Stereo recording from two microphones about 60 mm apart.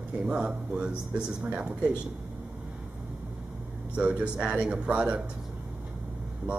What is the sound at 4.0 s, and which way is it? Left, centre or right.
Speech, centre.